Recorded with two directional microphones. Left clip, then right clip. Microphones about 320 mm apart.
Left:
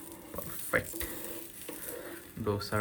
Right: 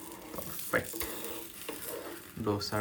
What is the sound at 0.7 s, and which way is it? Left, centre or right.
Speech, centre.